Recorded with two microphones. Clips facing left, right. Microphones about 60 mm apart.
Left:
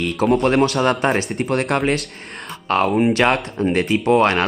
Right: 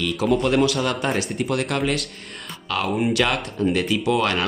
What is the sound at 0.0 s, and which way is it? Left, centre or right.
Speech, left.